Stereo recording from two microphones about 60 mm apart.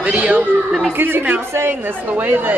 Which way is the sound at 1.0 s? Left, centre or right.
Right.